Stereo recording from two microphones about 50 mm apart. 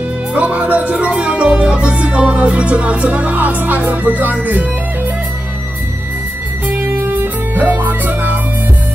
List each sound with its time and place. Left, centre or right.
0.3 s speech: right
1.1 s music: right
6.7 s music: right